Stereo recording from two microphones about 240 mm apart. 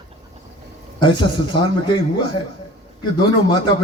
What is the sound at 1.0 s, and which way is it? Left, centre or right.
A man's voice, centre.